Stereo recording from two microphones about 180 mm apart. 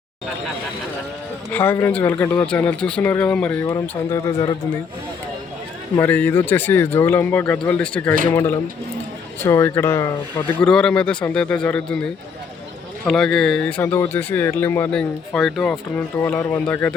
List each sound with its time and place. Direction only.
1.5 s speech: 10° left (ahead or behind)
3.7 s speech: 15° left (ahead or behind)
6.0 s speech: 10° left (ahead or behind)
9.4 s speech: 15° left (ahead or behind)
13.1 s speech: centre (ahead or behind)